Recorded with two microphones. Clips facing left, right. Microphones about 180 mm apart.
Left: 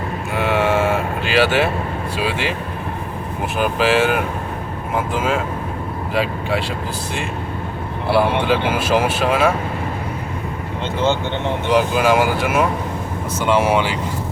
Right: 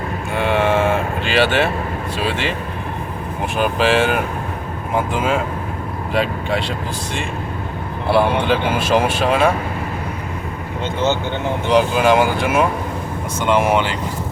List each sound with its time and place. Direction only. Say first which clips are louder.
0.3 s cattle: right 1 dB; 5° left (ahead or behind)
2.1 s speech: even; 10° left (ahead or behind)
3.6 s speech: even; 5° left (ahead or behind)
8.1 s speech: right 1 dB; 5° left (ahead or behind)
11.7 s speech: right 2 dB; 5° left (ahead or behind)